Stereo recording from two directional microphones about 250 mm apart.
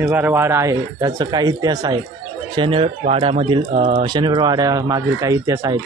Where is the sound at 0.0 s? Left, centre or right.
Centre.